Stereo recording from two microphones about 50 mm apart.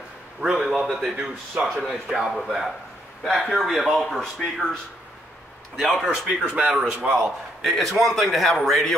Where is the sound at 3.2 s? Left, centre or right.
Centre.